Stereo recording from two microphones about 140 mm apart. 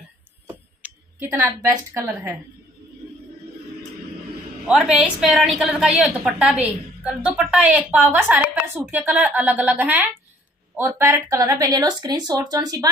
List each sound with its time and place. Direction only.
0.8 s speech: 10° right (ahead or behind)
4.6 s a woman's voice: 5° right (ahead or behind); by 12.9 s 25° right (ahead or behind)